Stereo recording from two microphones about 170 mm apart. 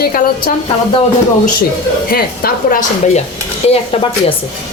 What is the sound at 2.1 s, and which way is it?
A woman's voice, 60° left (ahead or behind).